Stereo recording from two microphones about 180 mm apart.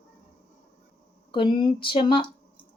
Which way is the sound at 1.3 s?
25° left (ahead or behind).